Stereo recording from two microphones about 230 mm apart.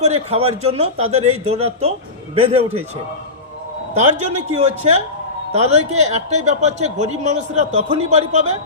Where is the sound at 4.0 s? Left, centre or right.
Right.